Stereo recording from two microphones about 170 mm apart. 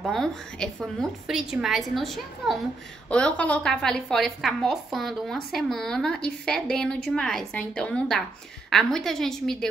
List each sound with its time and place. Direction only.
0.0 s a woman's voice: centre (ahead or behind)